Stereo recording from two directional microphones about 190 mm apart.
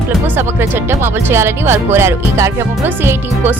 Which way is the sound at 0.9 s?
10° right (ahead or behind).